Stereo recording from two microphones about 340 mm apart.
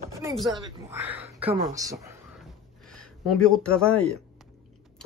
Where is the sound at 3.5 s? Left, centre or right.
Centre.